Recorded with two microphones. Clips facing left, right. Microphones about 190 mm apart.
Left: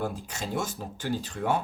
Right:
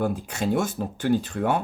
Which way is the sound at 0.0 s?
60° right (ahead or behind).